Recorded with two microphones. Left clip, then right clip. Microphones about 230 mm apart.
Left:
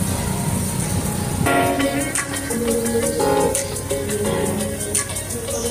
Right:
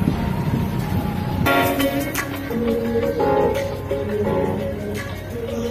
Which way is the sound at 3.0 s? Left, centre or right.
Left.